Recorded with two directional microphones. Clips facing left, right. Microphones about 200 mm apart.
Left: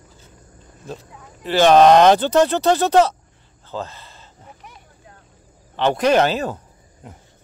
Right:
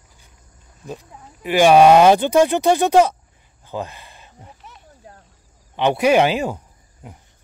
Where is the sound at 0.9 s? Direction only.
15° right (ahead or behind).